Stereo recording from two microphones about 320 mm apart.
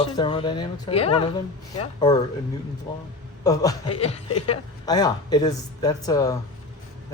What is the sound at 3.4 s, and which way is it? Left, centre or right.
Speech, centre.